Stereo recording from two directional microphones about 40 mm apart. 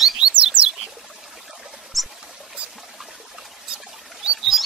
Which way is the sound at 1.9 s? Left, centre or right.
Centre.